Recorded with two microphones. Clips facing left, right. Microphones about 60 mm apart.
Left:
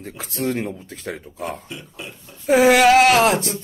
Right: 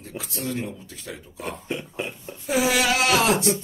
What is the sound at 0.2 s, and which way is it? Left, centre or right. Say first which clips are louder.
Speech: left 6 dB; left.